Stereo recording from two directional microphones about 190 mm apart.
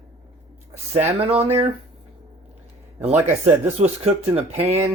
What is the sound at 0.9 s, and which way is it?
Speech, 30° right (ahead or behind).